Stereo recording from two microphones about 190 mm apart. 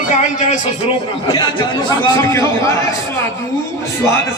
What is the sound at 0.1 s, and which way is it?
Speech, 40° left (ahead or behind).